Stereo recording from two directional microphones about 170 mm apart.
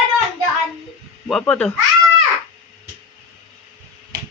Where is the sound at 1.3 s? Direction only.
5° left (ahead or behind).